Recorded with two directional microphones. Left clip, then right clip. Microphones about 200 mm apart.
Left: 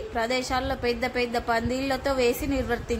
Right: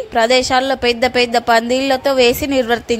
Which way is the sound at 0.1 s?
40° right (ahead or behind).